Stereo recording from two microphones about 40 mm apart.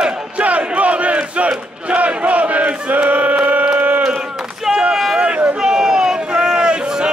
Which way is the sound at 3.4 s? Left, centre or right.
Right.